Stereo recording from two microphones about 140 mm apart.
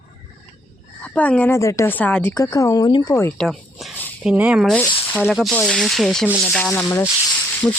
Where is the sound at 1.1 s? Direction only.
10° left (ahead or behind).